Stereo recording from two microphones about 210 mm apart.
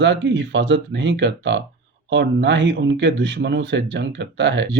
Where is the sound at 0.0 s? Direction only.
55° right (ahead or behind).